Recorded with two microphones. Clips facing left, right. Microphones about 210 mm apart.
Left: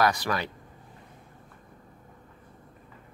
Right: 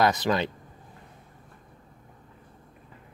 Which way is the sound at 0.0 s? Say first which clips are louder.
Right 3 dB; 20° right (ahead or behind).